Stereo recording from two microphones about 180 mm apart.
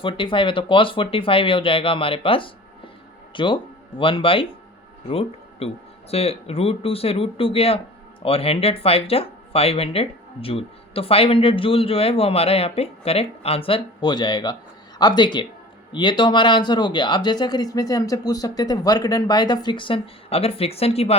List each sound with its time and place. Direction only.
0.0 s speech: 30° left (ahead or behind)